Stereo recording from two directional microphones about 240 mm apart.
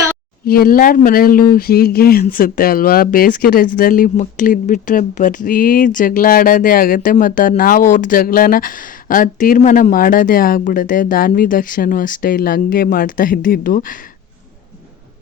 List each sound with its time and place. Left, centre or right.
0.4 s speech: left